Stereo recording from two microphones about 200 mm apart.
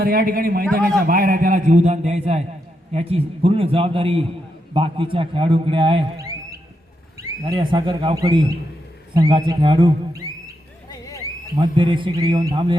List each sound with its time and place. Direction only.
0.0 s a man's voice: 45° right (ahead or behind); by 10.2 s 25° right (ahead or behind)
10.8 s a sound: 20° left (ahead or behind)
11.5 s speech: 25° right (ahead or behind)